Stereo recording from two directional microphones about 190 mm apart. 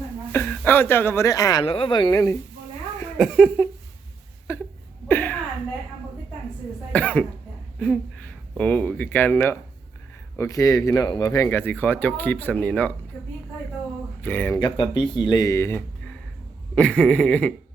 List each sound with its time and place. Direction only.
0.3 s speech: 10° left (ahead or behind)
1.6 s a woman's voice: 30° left (ahead or behind)
3.2 s a sound: 5° left (ahead or behind)
6.9 s speech: 5° left (ahead or behind)
7.8 s a sound: 5° left (ahead or behind)
8.5 s speech: 5° left (ahead or behind)
14.2 s speech: 10° left (ahead or behind)
14.6 s a woman's voice: 25° left (ahead or behind); by 17.5 s 5° left (ahead or behind)